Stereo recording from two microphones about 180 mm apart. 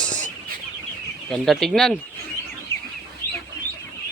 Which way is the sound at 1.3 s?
Centre (ahead or behind).